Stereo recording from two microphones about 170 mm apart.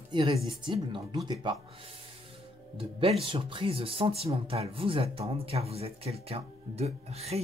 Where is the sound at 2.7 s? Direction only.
35° right (ahead or behind).